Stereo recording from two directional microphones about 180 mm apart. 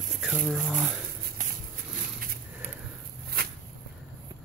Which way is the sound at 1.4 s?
45° right (ahead or behind).